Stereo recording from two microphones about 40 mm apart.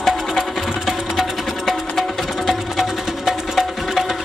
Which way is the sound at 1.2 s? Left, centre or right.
Centre.